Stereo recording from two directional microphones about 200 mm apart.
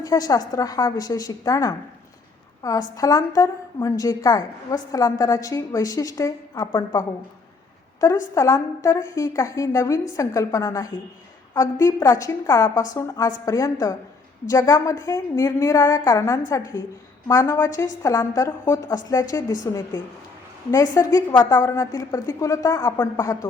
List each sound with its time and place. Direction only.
0.0 s a woman's voice: 20° left (ahead or behind)
8.0 s a woman's voice: 15° left (ahead or behind)